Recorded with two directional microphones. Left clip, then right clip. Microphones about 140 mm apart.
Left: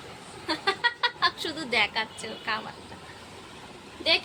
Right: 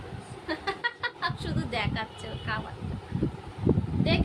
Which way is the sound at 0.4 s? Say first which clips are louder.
Left 5 dB; 20° left (ahead or behind).